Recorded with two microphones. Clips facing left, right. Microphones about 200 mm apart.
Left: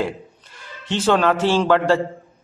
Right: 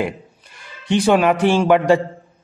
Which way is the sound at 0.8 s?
15° right (ahead or behind).